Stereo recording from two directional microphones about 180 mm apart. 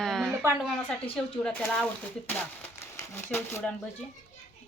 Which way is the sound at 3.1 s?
15° left (ahead or behind).